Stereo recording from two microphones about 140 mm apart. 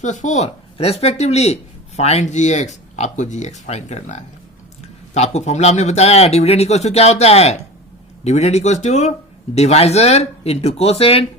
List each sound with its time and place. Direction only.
0.0 s speech: 60° left (ahead or behind); by 11.3 s 45° left (ahead or behind)